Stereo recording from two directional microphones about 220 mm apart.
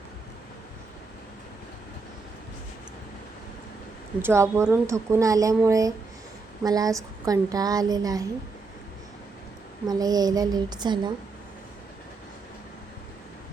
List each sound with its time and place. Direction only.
4.2 s a woman's voice: 10° right (ahead or behind)
9.8 s a woman's voice: 15° right (ahead or behind)